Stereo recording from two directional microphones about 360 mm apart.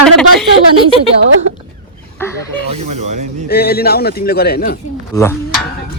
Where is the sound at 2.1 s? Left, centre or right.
Centre.